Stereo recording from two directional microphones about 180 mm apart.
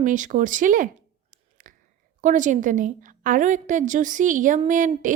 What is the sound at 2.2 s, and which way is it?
A woman's voice, 45° right (ahead or behind).